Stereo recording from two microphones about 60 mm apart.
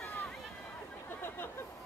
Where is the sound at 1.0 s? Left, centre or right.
Left.